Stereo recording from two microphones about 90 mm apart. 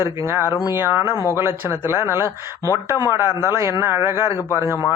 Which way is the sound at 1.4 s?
25° right (ahead or behind).